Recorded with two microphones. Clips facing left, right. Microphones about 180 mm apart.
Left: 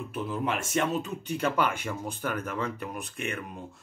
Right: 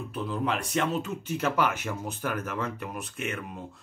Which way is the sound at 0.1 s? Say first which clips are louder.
Right 1 dB; 5° left (ahead or behind).